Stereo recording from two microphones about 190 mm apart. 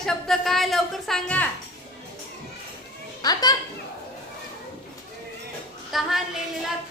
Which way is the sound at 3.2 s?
20° left (ahead or behind).